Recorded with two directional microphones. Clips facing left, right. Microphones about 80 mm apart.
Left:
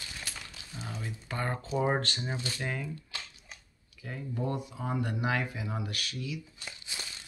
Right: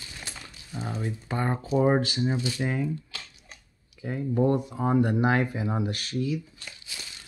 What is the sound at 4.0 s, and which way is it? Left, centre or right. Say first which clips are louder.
Speech: right 11 dB; right.